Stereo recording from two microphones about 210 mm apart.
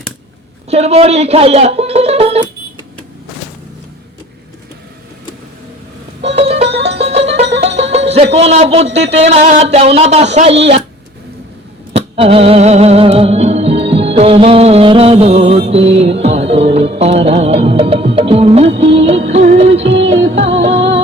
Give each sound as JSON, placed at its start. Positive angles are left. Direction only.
{"t": 0.7, "sound": "a man's voice", "side_deg": -30}
{"t": 6.3, "sound": "music", "side_deg": -30}
{"t": 7.5, "sound": "speech", "side_deg": -30}
{"t": 11.9, "sound": "music", "side_deg": -25}
{"t": 20.0, "sound": "music", "side_deg": -60}
{"t": 20.3, "sound": "music", "side_deg": -30}